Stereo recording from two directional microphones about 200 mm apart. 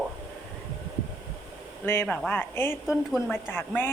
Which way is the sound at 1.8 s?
10° left (ahead or behind).